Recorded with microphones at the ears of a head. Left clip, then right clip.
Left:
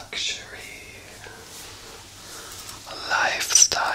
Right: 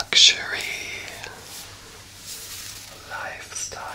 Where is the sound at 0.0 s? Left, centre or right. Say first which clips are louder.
Right 13 dB; right.